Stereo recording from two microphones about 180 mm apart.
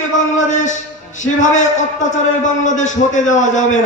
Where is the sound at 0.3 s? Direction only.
45° left (ahead or behind).